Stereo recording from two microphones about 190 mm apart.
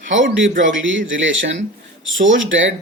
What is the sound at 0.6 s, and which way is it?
Speech, 90° right.